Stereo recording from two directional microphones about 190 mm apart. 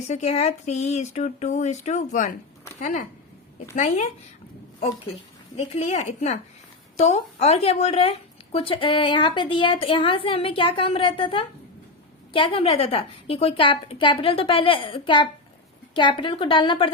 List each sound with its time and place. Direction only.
0.1 s speech: 35° left (ahead or behind)
3.8 s speech: 40° left (ahead or behind)
5.5 s a woman's voice: 35° left (ahead or behind)